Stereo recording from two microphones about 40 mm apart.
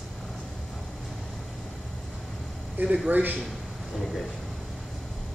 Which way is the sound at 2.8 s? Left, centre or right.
Right.